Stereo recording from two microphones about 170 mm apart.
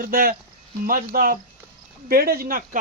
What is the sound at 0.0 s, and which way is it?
Speech, 60° right (ahead or behind).